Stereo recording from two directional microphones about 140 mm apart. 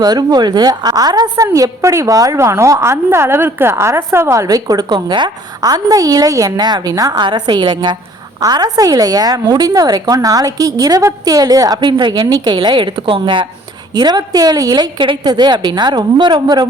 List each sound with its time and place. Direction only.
0.0 s a woman's voice: 30° right (ahead or behind)